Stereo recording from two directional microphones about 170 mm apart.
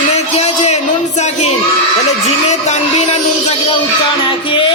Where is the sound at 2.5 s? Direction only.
40° left (ahead or behind).